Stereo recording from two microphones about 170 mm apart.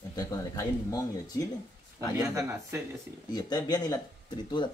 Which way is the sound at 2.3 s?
15° right (ahead or behind).